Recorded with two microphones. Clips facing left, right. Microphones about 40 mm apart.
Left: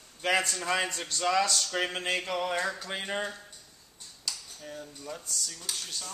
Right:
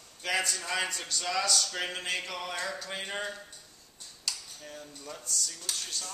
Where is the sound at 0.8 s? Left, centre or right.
Left.